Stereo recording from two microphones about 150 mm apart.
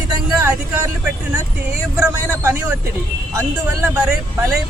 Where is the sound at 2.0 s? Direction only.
15° right (ahead or behind).